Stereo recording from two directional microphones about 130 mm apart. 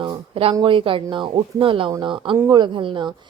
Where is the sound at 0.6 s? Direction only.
40° right (ahead or behind).